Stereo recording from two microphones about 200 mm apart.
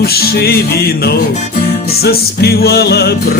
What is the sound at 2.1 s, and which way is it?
Music, 50° left (ahead or behind).